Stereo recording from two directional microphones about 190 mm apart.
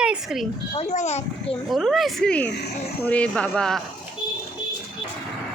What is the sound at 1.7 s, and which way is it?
A woman's voice, centre (ahead or behind).